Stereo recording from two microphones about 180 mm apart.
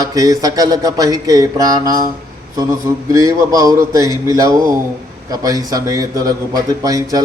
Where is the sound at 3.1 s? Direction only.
20° right (ahead or behind).